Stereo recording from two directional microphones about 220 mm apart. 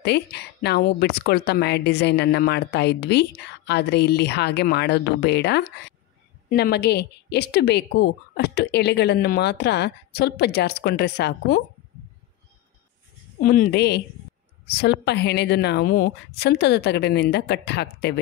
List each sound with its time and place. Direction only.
0.0 s speech: 50° left (ahead or behind)
13.4 s speech: 40° left (ahead or behind)